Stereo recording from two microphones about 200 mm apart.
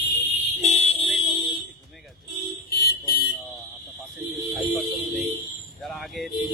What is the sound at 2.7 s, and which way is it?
Car alarm, 50° left (ahead or behind).